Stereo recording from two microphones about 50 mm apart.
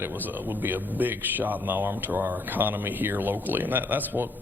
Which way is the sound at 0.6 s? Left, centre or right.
Right.